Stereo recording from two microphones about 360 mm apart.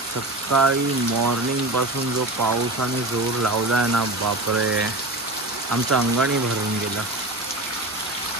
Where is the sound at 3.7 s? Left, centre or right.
Right.